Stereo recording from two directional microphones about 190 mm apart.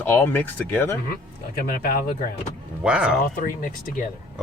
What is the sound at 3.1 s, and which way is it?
Speech, 45° left (ahead or behind).